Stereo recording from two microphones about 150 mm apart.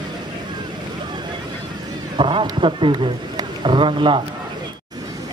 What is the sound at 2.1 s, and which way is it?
A man's voice, 35° right (ahead or behind).